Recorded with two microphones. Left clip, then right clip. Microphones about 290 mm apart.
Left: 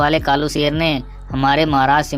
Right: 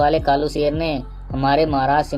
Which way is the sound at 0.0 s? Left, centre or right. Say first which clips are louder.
Left 1 dB; left.